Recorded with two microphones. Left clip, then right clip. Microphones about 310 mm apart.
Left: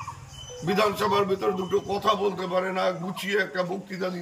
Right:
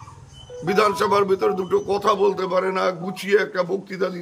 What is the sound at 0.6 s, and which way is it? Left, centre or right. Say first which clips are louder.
A man's voice: right 5 dB; centre.